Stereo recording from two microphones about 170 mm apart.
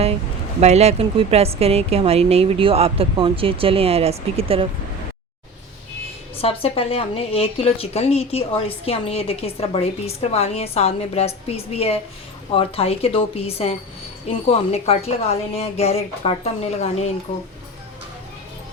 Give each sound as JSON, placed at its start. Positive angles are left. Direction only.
{"t": 0.6, "sound": "a woman's voice", "side_deg": -40}
{"t": 6.4, "sound": "speech", "side_deg": 35}